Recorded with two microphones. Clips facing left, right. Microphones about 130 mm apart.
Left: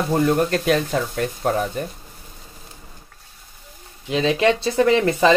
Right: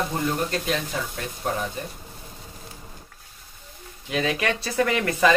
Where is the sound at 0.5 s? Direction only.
55° left (ahead or behind).